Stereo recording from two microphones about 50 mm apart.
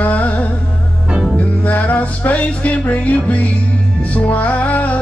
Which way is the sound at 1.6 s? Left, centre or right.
Left.